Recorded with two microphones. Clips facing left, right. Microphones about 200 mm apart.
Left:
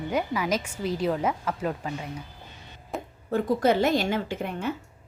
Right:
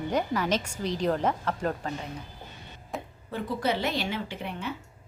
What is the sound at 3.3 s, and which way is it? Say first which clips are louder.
A woman's voice: left 7 dB; 50° left (ahead or behind).